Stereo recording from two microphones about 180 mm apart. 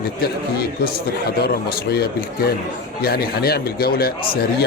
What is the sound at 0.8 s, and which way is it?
Speech, 60° left (ahead or behind).